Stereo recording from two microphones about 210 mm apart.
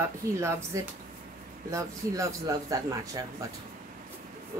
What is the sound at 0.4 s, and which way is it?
Speech, 15° right (ahead or behind).